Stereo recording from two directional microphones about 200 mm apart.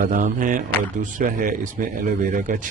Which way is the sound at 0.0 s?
40° right (ahead or behind).